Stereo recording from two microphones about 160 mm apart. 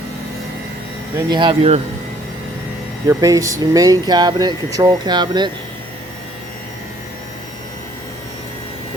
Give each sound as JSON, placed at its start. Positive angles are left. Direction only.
{"t": 1.3, "sound": "speech", "side_deg": -30}
{"t": 3.1, "sound": "speech", "side_deg": -20}